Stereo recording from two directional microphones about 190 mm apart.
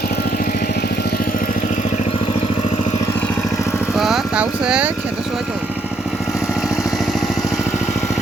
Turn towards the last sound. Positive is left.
turn(degrees=0)  # may be behind; listen again after turning